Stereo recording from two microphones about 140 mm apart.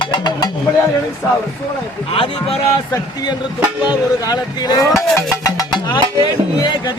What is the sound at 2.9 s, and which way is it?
Speech, 25° left (ahead or behind).